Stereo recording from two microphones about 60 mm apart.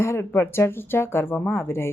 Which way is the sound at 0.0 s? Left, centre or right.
Left.